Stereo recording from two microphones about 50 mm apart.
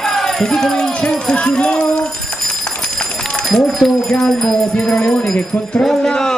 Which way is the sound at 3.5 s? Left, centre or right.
Centre.